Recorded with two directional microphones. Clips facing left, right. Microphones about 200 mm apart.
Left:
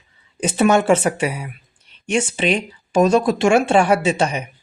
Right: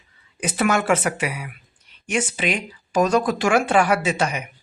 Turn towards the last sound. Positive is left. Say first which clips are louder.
# left 4 dB
turn(degrees=30)  # may be behind; listen again after turning